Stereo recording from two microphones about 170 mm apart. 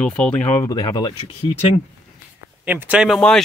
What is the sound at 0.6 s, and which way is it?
Speech, 25° left (ahead or behind).